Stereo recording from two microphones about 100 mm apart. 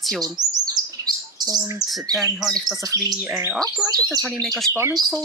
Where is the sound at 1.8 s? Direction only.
40° right (ahead or behind).